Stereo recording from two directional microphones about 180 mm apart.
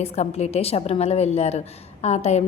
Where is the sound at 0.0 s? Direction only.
35° left (ahead or behind).